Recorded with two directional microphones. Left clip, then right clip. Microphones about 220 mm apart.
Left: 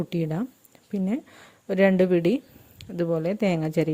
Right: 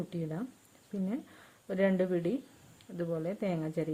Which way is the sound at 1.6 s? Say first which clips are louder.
Left 10 dB; 40° left (ahead or behind).